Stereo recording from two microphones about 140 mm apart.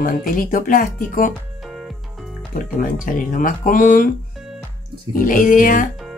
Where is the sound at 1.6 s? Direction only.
Centre (ahead or behind).